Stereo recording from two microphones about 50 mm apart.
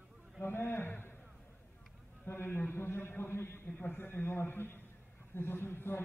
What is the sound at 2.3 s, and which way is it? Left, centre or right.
A man's voice, left.